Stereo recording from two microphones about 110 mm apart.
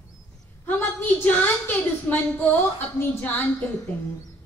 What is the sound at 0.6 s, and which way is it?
A woman's voice, 15° left (ahead or behind).